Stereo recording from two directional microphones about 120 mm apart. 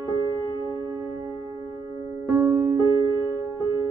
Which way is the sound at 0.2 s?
30° right (ahead or behind).